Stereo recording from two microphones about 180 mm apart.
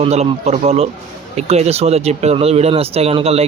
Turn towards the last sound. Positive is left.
turn(degrees=-35)  # may be behind; listen again after turning